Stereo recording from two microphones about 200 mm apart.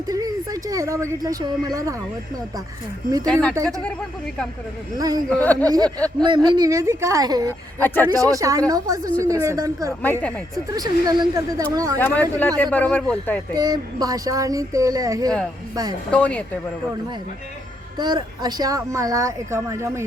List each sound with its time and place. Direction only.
0.1 s a woman's voice: 15° right (ahead or behind)
3.5 s speech: 15° right (ahead or behind)
4.9 s a woman's voice: 20° right (ahead or behind)
5.3 s a man's voice: 10° left (ahead or behind)
5.6 s a woman's voice: 20° right (ahead or behind)
7.8 s a man's voice: 10° left (ahead or behind)
8.0 s speech: 15° right (ahead or behind)
10.0 s a man's voice: 10° left (ahead or behind)
10.7 s speech: 20° right (ahead or behind)
11.9 s a man's voice: 10° left (ahead or behind)
13.5 s speech: 20° right (ahead or behind)
16.1 s a man's voice: 5° left (ahead or behind)
17.9 s speech: 20° right (ahead or behind)